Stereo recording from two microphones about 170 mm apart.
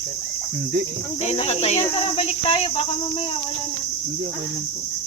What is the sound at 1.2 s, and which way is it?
Cricket, 40° left (ahead or behind).